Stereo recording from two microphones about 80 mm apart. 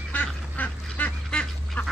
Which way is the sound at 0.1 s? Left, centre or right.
Left.